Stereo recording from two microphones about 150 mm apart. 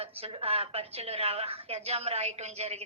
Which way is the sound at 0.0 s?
40° right (ahead or behind).